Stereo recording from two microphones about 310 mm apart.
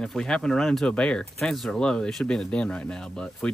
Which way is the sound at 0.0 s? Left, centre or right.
Centre.